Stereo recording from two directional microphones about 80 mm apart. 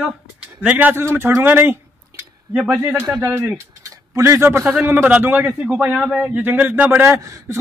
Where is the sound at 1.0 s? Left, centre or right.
Right.